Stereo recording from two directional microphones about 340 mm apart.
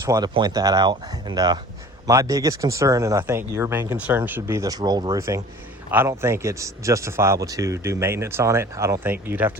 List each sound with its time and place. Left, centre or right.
0.0 s speech: centre